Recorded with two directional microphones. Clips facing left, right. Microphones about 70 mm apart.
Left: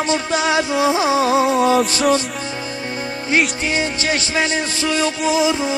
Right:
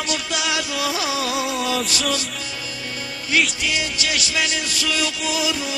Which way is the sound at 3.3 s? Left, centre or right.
Left.